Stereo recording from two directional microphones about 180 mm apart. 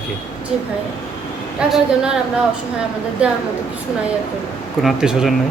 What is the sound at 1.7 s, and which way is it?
Speech, 5° right (ahead or behind).